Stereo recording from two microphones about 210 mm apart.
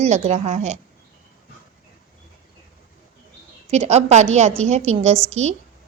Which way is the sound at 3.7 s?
30° right (ahead or behind).